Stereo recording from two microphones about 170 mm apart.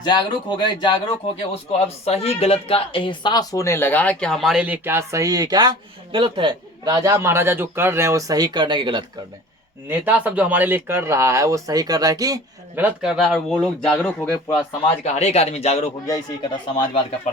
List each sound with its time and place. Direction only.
0.0 s speech: 25° left (ahead or behind)
2.0 s speech: 35° left (ahead or behind); by 9.0 s 25° right (ahead or behind)
9.9 s speech: 10° right (ahead or behind)
12.7 s speech: 10° right (ahead or behind); by 14.5 s 10° left (ahead or behind)
15.0 s speech: 40° left (ahead or behind)
16.0 s speech: 20° left (ahead or behind)